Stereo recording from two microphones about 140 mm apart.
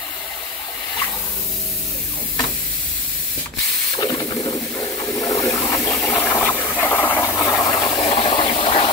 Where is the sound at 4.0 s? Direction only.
25° left (ahead or behind).